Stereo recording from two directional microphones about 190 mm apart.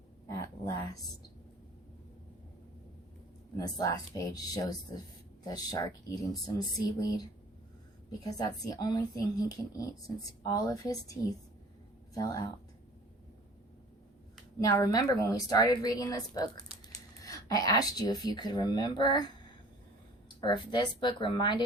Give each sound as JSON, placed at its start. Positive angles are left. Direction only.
{"t": 0.3, "sound": "a sound", "side_deg": 20}
{"t": 3.6, "sound": "speech", "side_deg": 20}
{"t": 8.2, "sound": "a woman's voice", "side_deg": 20}
{"t": 14.6, "sound": "speech", "side_deg": 20}
{"t": 20.4, "sound": "speech", "side_deg": 25}